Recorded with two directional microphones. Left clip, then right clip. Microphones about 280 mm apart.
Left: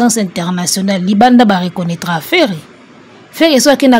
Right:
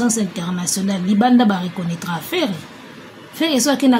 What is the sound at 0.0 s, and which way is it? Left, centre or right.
A woman's voice, left.